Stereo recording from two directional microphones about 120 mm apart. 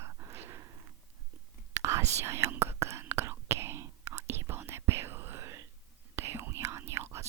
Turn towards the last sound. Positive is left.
turn(degrees=-20)  # may be behind; listen again after turning